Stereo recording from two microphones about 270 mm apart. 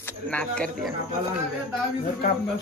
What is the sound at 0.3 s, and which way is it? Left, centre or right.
Speech, centre.